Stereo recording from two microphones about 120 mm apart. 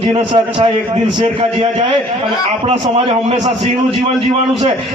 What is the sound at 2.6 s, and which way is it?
Speech, 55° right (ahead or behind).